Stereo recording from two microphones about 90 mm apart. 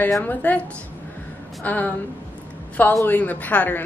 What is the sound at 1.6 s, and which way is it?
A woman's voice, 20° left (ahead or behind).